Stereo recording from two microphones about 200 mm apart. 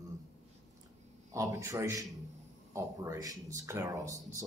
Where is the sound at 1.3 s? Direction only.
15° right (ahead or behind).